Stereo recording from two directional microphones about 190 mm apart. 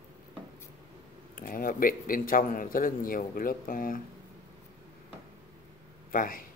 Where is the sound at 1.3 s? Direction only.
45° left (ahead or behind).